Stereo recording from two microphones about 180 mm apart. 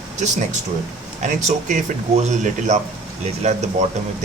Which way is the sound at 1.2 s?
40° right (ahead or behind).